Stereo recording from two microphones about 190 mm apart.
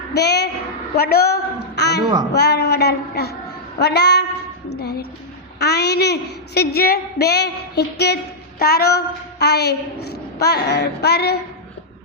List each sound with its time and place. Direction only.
0.1 s a woman's voice: 60° left (ahead or behind)